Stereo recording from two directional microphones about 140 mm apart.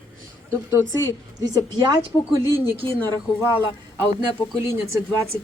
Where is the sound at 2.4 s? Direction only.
20° right (ahead or behind).